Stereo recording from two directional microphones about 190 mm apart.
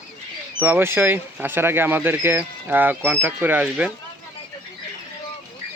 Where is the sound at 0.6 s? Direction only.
10° right (ahead or behind).